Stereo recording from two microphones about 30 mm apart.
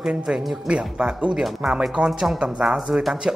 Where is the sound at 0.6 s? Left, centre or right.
Right.